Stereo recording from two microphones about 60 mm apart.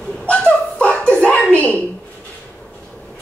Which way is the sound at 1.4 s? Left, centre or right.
Left.